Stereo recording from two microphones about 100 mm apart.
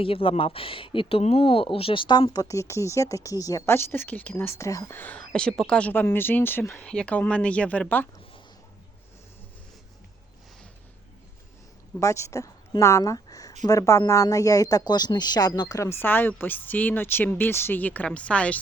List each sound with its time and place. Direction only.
0.0 s speech: 65° left (ahead or behind); by 3.6 s 35° left (ahead or behind)
3.7 s speech: 25° left (ahead or behind)
4.9 s speech: 15° left (ahead or behind)
6.8 s speech: 10° left (ahead or behind)
11.9 s a woman's voice: 30° left (ahead or behind)
15.8 s speech: 25° left (ahead or behind)